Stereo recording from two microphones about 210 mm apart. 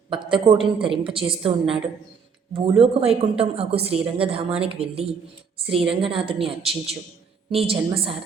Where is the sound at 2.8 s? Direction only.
25° right (ahead or behind).